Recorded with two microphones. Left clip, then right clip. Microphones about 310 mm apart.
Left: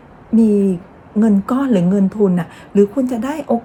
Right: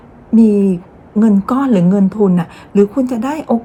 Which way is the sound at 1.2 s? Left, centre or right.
Centre.